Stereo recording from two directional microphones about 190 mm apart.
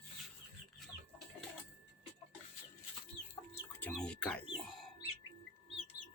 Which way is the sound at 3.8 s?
5° left (ahead or behind).